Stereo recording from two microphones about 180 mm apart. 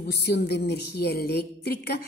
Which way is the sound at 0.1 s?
65° left (ahead or behind).